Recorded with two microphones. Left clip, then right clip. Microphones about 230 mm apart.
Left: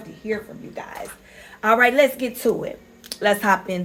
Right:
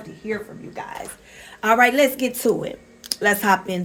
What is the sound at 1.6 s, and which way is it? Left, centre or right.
Speech, right.